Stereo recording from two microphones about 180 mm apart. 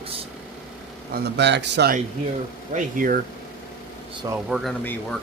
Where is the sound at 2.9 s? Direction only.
50° right (ahead or behind).